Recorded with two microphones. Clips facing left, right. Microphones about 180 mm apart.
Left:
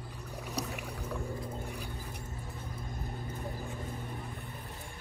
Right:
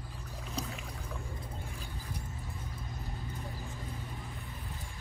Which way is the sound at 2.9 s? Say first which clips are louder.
Left 3 dB; 50° left (ahead or behind).